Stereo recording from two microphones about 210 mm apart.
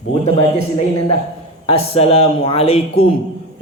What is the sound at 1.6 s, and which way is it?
A man's voice, 30° left (ahead or behind).